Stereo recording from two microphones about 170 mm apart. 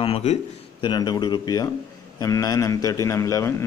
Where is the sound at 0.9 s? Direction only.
25° left (ahead or behind).